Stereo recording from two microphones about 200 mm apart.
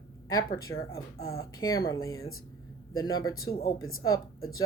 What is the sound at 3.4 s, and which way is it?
Speech, 50° left (ahead or behind).